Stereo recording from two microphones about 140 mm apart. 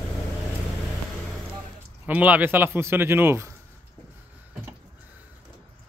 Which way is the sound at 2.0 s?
10° right (ahead or behind).